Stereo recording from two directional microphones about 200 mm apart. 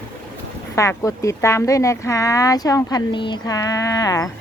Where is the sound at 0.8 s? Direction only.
15° left (ahead or behind).